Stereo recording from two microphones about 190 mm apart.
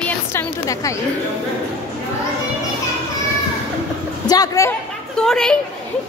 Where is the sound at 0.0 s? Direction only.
10° left (ahead or behind).